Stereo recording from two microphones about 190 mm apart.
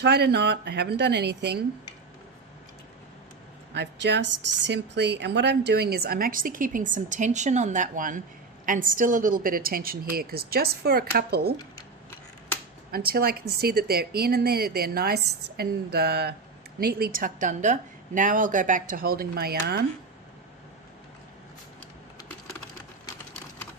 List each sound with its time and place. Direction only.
0.0 s a woman's voice: 60° right (ahead or behind)
3.8 s speech: 65° right (ahead or behind)
12.9 s a woman's voice: 55° right (ahead or behind)